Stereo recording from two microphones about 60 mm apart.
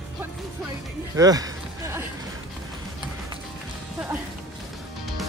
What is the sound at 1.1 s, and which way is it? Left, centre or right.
Speech, right.